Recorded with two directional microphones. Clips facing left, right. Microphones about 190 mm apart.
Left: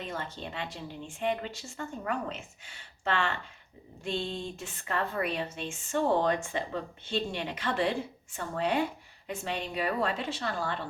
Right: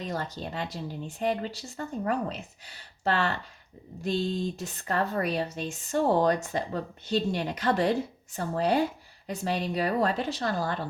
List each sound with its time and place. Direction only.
0.0 s a woman's voice: 40° right (ahead or behind)